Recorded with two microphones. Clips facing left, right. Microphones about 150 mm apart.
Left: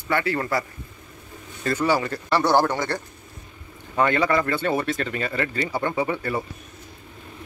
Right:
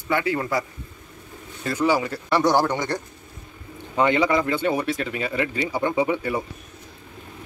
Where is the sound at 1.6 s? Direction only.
10° right (ahead or behind).